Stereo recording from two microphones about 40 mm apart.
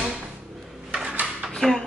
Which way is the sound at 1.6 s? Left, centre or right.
Centre.